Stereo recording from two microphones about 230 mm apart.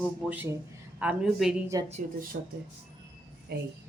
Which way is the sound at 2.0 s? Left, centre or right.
Right.